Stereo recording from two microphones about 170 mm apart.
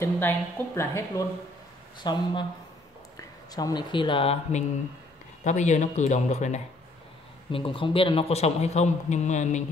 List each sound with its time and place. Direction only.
0.0 s speech: 15° left (ahead or behind)
2.0 s speech: 25° left (ahead or behind); by 6.6 s 40° left (ahead or behind)
7.5 s speech: 30° left (ahead or behind)